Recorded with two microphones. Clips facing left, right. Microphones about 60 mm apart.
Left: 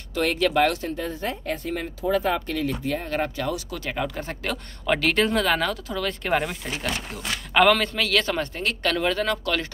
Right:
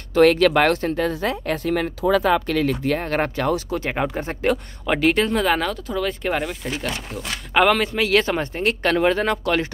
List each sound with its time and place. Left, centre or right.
0.1 s speech: right
3.7 s speech: right
4.8 s a man's voice: centre
7.5 s a man's voice: centre
8.0 s speech: right